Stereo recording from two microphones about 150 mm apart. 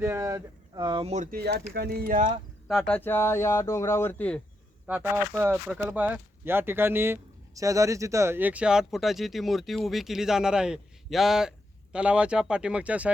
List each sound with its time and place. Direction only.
0.0 s speech: 20° right (ahead or behind)
1.0 s speech: 50° right (ahead or behind)
1.3 s speech: 90° right
2.6 s speech: 5° left (ahead or behind)
4.9 s speech: 15° right (ahead or behind)